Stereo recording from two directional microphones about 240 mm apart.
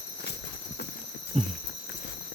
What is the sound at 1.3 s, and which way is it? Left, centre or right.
Walk, right.